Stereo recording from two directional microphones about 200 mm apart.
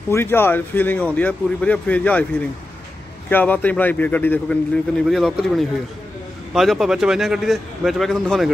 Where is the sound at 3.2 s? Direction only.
10° left (ahead or behind).